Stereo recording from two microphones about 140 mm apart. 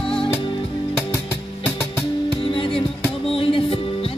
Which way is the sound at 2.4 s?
40° left (ahead or behind).